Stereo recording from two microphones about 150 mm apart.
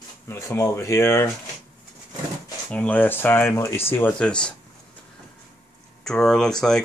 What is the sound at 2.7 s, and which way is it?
Speech, 10° left (ahead or behind).